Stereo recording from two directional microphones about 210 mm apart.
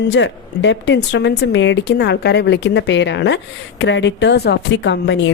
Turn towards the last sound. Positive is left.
turn(degrees=55)  # may be behind; listen again after turning